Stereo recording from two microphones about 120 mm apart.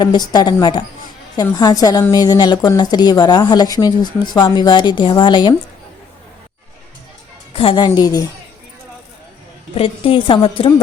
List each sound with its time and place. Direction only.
0.0 s a woman's voice: 35° left (ahead or behind)
7.5 s a woman's voice: 50° left (ahead or behind); by 8.3 s 30° left (ahead or behind)
9.7 s a woman's voice: 50° left (ahead or behind)